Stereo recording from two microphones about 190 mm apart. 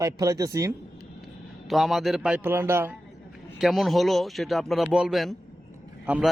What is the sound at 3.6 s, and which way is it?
A man's voice, centre (ahead or behind).